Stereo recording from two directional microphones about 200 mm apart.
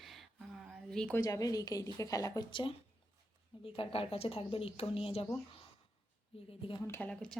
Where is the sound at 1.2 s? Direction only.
15° left (ahead or behind).